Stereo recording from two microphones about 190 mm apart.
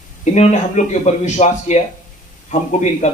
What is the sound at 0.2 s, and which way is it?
Speech, 40° left (ahead or behind).